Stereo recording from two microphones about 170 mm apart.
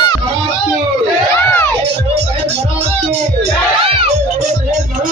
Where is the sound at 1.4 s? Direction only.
10° left (ahead or behind).